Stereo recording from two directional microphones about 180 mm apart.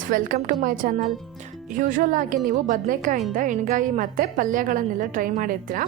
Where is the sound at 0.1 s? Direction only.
50° right (ahead or behind).